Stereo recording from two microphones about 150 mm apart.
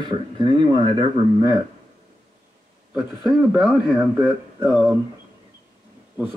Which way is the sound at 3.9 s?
10° right (ahead or behind).